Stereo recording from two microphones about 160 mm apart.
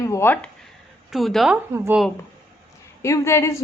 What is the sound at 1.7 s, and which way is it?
Speech, 15° right (ahead or behind).